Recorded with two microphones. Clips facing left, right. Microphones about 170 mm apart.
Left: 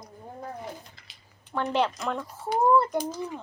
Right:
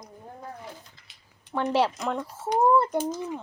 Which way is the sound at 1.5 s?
5° right (ahead or behind).